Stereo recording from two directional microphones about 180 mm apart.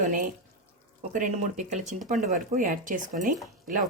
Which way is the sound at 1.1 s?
45° right (ahead or behind).